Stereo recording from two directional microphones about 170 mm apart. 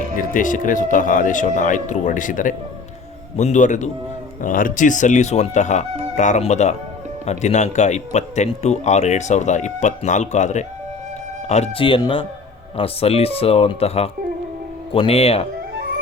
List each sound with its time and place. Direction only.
0.3 s speech: 50° left (ahead or behind); by 15.4 s 35° left (ahead or behind)